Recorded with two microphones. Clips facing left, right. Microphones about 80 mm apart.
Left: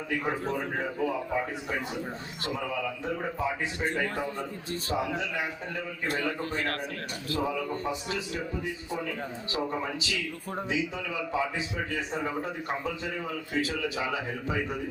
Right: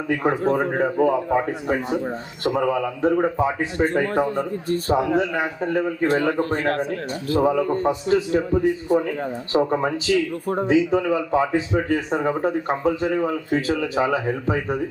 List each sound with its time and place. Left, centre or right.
0.2 s a man's voice: right